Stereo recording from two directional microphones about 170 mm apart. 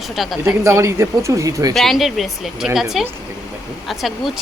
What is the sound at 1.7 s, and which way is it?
A woman's voice, centre (ahead or behind).